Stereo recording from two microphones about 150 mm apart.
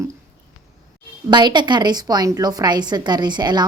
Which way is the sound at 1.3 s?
30° right (ahead or behind).